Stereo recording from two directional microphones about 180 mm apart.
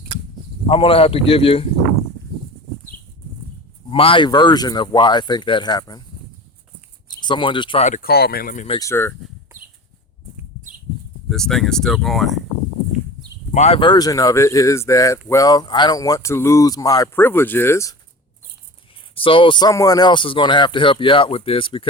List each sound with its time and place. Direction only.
0.7 s speech: 30° left (ahead or behind)
3.8 s speech: 30° left (ahead or behind)
7.1 s speech: 25° left (ahead or behind)
7.9 s speech: 50° left (ahead or behind)
8.8 s speech: 15° left (ahead or behind)
11.3 s speech: 5° left (ahead or behind)
13.5 s speech: 35° left (ahead or behind); by 17.9 s 15° left (ahead or behind)
19.1 s speech: 30° left (ahead or behind)